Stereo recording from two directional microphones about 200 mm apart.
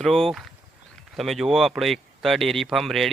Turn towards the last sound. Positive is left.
turn(degrees=0)  # may be behind; listen again after turning